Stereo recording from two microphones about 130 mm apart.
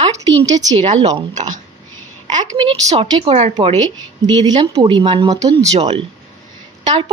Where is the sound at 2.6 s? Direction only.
40° right (ahead or behind).